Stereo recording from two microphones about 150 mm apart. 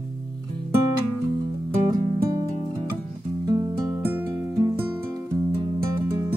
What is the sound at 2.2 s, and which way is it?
Music, 20° right (ahead or behind).